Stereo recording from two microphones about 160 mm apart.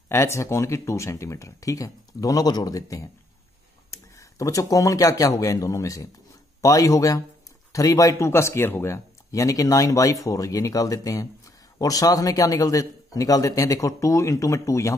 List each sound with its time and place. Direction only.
0.1 s speech: 20° left (ahead or behind)